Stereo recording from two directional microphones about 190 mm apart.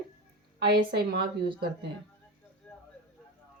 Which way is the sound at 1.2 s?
25° right (ahead or behind).